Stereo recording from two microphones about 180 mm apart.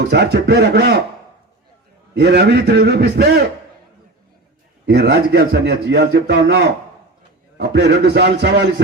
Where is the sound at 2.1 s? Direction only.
65° right (ahead or behind).